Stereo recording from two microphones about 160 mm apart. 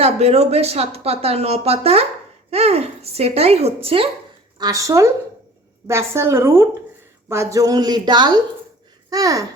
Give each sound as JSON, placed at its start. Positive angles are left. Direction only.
{"t": 0.0, "sound": "speech", "side_deg": -40}
{"t": 4.5, "sound": "a woman's voice", "side_deg": -25}